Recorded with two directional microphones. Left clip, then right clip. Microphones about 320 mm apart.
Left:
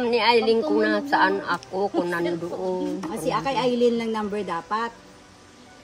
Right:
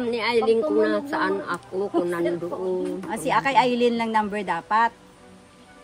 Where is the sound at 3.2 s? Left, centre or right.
Centre.